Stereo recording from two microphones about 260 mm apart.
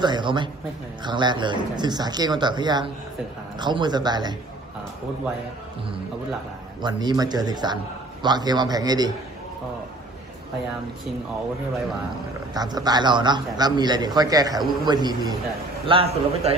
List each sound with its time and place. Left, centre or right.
0.0 s a man's voice: centre
6.8 s a man's voice: centre
12.5 s a man's voice: centre